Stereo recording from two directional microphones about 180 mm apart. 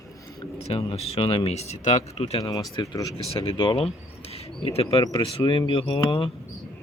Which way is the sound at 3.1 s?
30° left (ahead or behind).